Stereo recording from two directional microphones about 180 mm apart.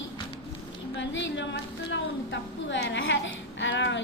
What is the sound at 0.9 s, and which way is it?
A woman's voice, 90° left.